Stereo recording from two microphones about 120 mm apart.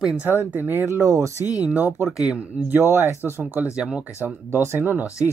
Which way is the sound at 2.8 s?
20° right (ahead or behind).